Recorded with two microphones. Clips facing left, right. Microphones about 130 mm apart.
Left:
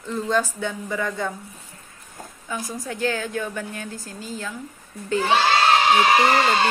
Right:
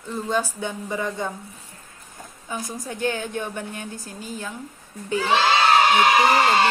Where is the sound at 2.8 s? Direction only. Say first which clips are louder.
Left 1 dB; 20° right (ahead or behind).